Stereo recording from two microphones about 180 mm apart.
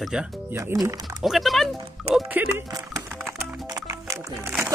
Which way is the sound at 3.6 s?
20° right (ahead or behind).